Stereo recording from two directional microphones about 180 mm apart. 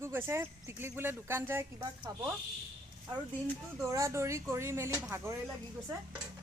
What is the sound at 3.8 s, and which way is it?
Speech, 20° right (ahead or behind).